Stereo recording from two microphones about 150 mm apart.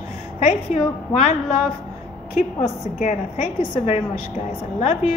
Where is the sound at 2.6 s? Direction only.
50° left (ahead or behind).